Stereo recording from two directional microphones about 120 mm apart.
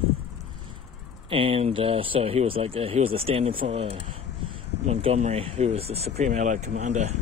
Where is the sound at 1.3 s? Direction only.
50° right (ahead or behind).